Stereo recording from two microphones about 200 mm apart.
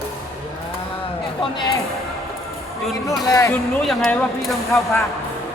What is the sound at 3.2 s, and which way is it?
Speech, 15° left (ahead or behind).